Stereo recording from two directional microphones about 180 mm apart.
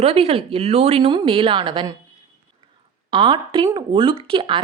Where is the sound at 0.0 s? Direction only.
35° right (ahead or behind).